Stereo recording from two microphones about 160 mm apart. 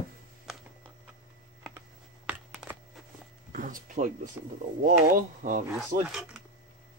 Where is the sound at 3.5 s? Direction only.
55° right (ahead or behind).